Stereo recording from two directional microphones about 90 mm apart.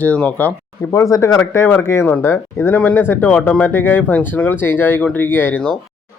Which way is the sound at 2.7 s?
20° left (ahead or behind).